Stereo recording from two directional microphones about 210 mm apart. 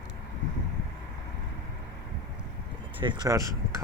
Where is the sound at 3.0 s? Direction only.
20° right (ahead or behind).